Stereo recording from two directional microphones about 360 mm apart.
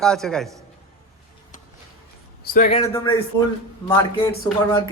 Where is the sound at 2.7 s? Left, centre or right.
Centre.